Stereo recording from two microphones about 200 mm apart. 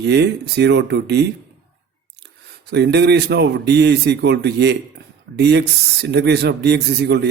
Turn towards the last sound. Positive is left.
turn(degrees=-55)  # may be behind; listen again after turning